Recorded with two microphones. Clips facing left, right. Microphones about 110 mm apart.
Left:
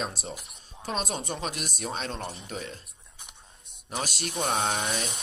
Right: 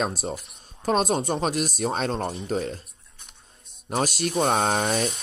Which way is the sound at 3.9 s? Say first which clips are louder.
Right 8 dB; 50° right (ahead or behind).